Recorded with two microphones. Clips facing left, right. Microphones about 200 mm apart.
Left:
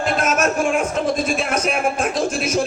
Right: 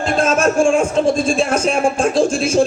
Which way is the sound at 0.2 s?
30° right (ahead or behind).